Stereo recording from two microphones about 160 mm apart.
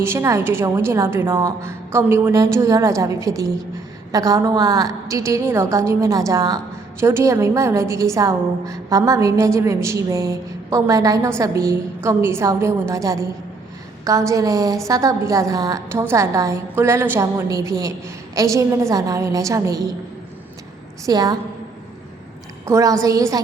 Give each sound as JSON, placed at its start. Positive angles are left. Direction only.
{"t": 0.0, "sound": "a woman's voice", "side_deg": -15}
{"t": 21.0, "sound": "a woman's voice", "side_deg": -25}
{"t": 22.6, "sound": "a woman's voice", "side_deg": -20}